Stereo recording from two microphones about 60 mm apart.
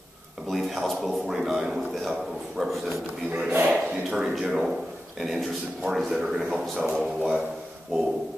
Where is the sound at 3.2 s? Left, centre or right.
Centre.